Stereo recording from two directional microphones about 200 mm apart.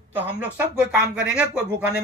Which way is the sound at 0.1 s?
5° right (ahead or behind).